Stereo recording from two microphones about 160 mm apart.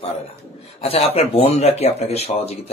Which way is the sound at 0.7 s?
40° left (ahead or behind).